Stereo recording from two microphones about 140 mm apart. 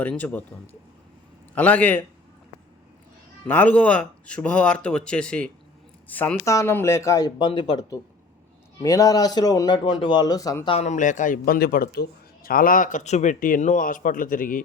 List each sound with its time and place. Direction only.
0.0 s speech: 10° left (ahead or behind)
3.4 s speech: 10° left (ahead or behind)
6.4 s speech: 20° left (ahead or behind)
10.7 s a man's voice: 55° left (ahead or behind); by 14.6 s 80° left